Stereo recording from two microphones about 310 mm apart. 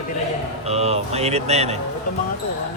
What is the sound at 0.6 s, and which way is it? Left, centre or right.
Speech, centre.